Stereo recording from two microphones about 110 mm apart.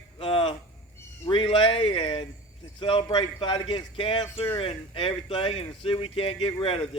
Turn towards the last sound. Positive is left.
turn(degrees=55)  # may be behind; listen again after turning